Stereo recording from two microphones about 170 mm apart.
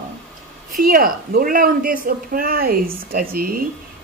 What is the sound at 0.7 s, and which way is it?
Speech, 55° right (ahead or behind).